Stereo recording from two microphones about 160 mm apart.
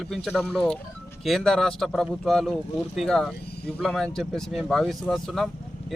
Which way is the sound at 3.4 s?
90° left.